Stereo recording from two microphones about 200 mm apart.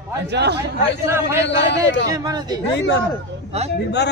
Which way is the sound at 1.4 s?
60° left (ahead or behind).